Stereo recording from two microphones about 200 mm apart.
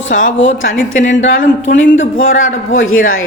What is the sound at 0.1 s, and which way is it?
Speech, 40° left (ahead or behind).